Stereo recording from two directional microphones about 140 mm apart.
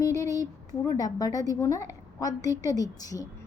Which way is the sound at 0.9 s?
25° left (ahead or behind).